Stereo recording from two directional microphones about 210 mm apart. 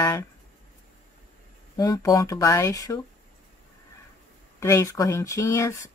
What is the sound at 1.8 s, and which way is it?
Speech, 15° left (ahead or behind).